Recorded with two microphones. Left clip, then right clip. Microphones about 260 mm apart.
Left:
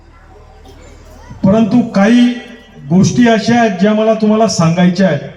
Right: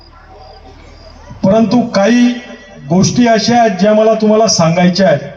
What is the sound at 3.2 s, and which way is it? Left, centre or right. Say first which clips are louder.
A man's voice: right 1 dB; right.